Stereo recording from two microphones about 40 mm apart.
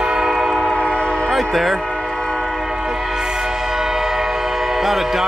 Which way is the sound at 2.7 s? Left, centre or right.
Centre.